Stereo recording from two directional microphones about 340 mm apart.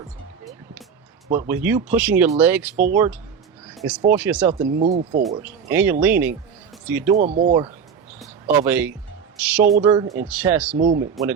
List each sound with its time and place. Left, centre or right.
1.5 s speech: centre
3.7 s a sound: centre
4.1 s speech: centre
4.7 s speech: right
5.4 s speech: centre
7.2 s speech: right
8.2 s speech: centre
10.8 s speech: right
11.0 s speech: centre